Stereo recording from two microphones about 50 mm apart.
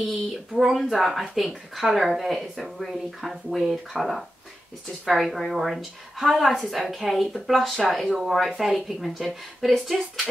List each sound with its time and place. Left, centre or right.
0.1 s speech: centre